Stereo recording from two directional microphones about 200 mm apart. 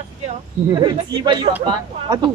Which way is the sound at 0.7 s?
20° right (ahead or behind).